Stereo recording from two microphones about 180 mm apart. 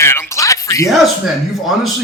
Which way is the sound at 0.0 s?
15° left (ahead or behind).